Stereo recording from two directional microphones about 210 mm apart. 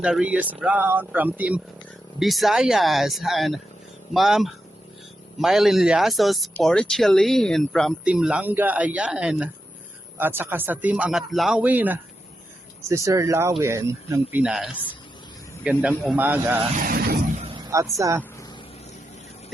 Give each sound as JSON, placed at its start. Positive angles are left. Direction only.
{"t": 0.0, "sound": "speech", "side_deg": -5}
{"t": 16.8, "sound": "a sound", "side_deg": -45}
{"t": 17.4, "sound": "vehicle", "side_deg": -25}
{"t": 17.7, "sound": "speech", "side_deg": -15}